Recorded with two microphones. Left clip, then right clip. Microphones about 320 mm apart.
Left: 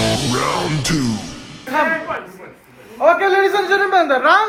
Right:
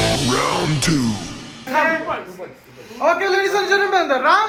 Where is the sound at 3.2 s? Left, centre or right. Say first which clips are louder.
Left 3 dB; left.